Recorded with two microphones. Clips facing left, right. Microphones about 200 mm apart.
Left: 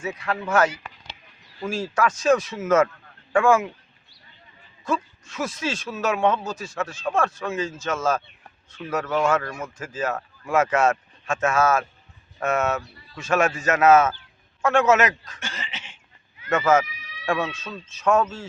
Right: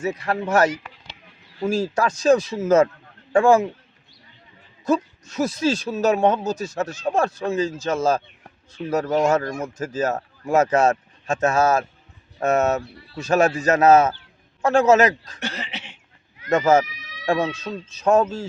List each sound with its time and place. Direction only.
0.0 s speech: 40° right (ahead or behind)
4.9 s speech: 40° right (ahead or behind)
15.4 s a sound: 65° right (ahead or behind)
16.5 s speech: 35° right (ahead or behind)
17.2 s a sound: 35° right (ahead or behind)
17.5 s speech: 35° right (ahead or behind)